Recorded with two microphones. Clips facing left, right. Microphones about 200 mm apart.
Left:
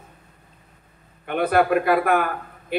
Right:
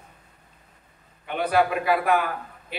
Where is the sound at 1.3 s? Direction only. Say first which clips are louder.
Left 3 dB; 55° left (ahead or behind).